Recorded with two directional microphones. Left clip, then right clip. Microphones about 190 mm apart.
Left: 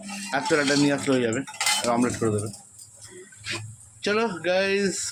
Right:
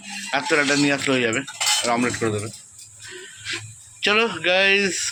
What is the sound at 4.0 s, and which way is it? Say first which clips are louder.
Speech: right 5 dB; 10° left (ahead or behind).